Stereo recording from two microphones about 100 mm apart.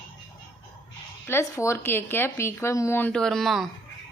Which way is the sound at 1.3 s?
25° left (ahead or behind).